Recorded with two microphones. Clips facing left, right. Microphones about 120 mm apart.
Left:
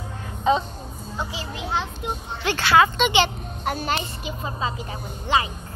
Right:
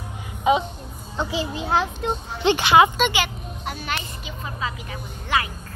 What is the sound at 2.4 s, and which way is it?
Speech, 20° right (ahead or behind).